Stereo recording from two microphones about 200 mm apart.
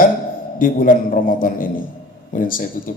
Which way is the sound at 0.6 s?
45° left (ahead or behind).